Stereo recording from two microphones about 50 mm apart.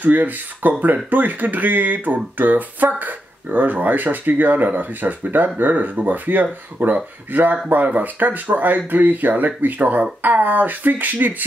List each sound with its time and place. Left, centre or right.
0.0 s speech: right